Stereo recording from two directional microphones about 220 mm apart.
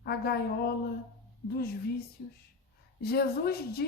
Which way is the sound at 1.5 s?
45° left (ahead or behind).